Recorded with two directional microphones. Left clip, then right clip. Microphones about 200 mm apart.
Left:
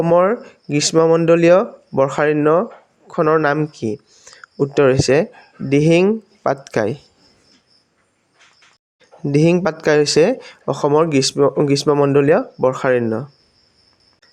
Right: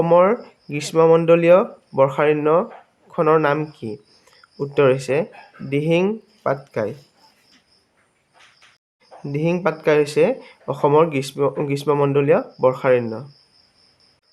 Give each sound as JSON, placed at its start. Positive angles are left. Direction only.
{"t": 0.0, "sound": "speech", "side_deg": 20}
{"t": 9.2, "sound": "speech", "side_deg": 35}